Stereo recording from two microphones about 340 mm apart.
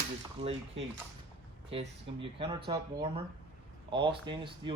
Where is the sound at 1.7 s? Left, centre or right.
Centre.